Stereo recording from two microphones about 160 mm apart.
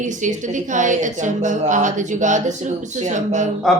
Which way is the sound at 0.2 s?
50° right (ahead or behind).